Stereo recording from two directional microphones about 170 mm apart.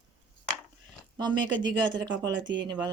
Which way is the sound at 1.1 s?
25° right (ahead or behind).